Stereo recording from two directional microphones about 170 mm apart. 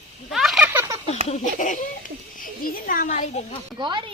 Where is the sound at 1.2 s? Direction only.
45° left (ahead or behind).